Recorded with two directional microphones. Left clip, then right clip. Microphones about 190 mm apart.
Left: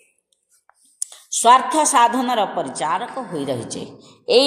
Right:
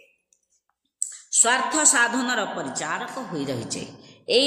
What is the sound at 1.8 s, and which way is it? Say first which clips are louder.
A woman's voice: left 6 dB; 15° left (ahead or behind).